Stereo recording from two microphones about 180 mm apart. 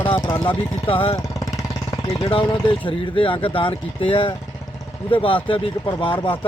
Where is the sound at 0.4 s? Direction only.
30° left (ahead or behind).